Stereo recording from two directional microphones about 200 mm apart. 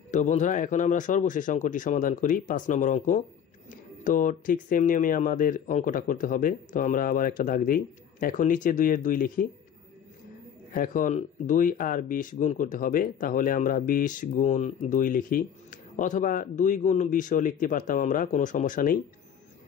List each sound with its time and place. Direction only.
0.1 s speech: 35° left (ahead or behind)
10.7 s speech: 45° left (ahead or behind)